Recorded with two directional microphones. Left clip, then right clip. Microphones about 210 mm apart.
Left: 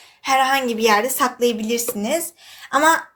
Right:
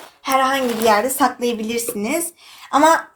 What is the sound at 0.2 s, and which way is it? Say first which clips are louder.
A woman's voice: even; 45° left (ahead or behind).